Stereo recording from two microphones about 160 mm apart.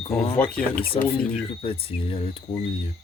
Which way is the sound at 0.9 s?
40° left (ahead or behind).